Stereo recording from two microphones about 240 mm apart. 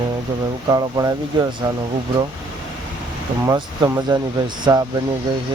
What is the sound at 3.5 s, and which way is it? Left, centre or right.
Speech, centre.